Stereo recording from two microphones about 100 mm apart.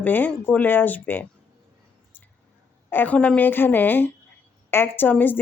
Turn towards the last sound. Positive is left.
turn(degrees=20)  # may be behind; listen again after turning